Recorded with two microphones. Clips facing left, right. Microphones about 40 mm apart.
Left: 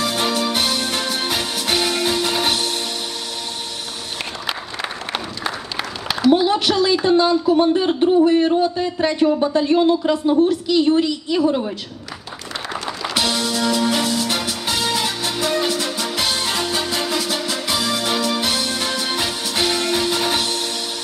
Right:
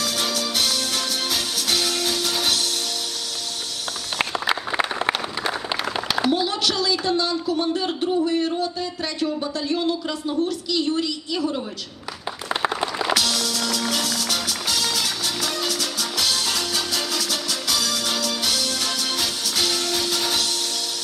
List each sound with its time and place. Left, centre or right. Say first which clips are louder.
0.0 s music: left 5 dB; left
6.3 s a sound: left 6 dB; left
8.2 s speech: left 7 dB; left
12.6 s music: right 4 dB; right
13.1 s music: left 3 dB; left